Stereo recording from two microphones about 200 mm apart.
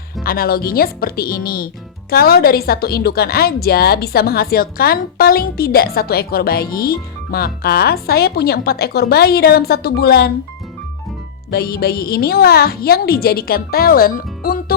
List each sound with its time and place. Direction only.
0.2 s speech: 50° left (ahead or behind)
11.5 s speech: 50° left (ahead or behind)